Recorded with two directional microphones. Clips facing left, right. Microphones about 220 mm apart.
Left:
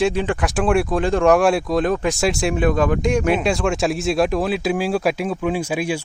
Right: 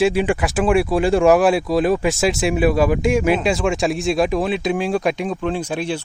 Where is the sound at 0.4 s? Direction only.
Centre (ahead or behind).